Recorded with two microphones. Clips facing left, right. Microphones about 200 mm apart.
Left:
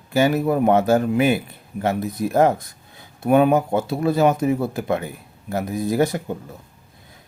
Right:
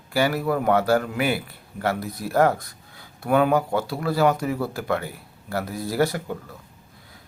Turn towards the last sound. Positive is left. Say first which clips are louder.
# left 3 dB
turn(degrees=20)  # may be behind; listen again after turning